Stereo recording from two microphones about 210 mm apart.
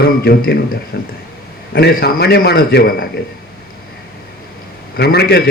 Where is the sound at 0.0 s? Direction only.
50° left (ahead or behind).